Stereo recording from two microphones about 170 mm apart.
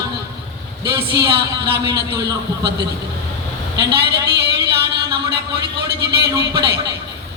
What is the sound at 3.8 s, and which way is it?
Speech, 75° right (ahead or behind).